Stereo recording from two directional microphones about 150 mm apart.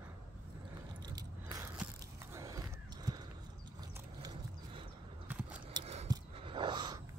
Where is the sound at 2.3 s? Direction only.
20° right (ahead or behind).